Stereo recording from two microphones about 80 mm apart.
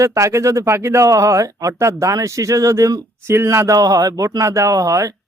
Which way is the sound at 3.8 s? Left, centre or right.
Right.